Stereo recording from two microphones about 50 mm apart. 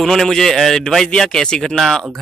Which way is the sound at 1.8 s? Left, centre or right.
Centre.